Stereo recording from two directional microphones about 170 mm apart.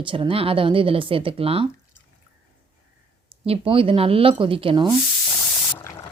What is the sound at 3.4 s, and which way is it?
Speech, 35° right (ahead or behind).